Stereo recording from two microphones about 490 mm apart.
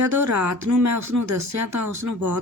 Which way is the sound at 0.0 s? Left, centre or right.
Right.